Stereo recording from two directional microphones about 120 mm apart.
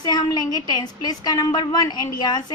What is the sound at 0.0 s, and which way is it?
A woman's voice, 35° left (ahead or behind).